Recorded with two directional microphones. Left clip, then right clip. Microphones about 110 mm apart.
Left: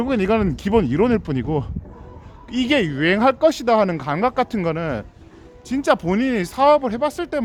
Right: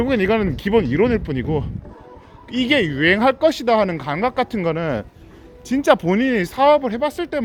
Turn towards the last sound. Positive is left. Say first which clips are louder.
# even
turn(degrees=40)  # may be behind; listen again after turning